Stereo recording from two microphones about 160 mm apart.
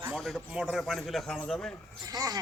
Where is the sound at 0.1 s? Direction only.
5° left (ahead or behind).